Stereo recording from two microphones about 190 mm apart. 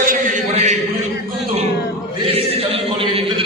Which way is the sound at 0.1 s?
40° right (ahead or behind).